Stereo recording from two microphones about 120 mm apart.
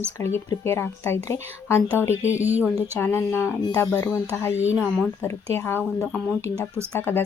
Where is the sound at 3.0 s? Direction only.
20° left (ahead or behind).